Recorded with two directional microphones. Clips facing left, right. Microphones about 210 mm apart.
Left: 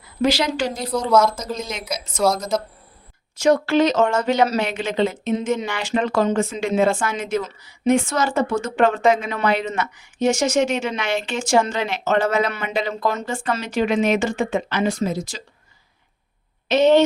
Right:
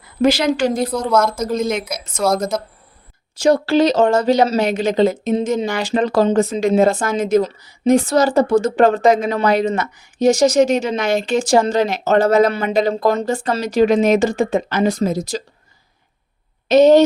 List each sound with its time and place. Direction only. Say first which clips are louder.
0.2 s a woman's voice: right 5 dB; 50° right (ahead or behind)
0.9 s a woman's voice: right 2 dB; centre (ahead or behind)
1.1 s speech: even; 55° right (ahead or behind)
3.3 s speech: right 3 dB; 30° right (ahead or behind)
16.6 s speech: right 5 dB; 40° right (ahead or behind)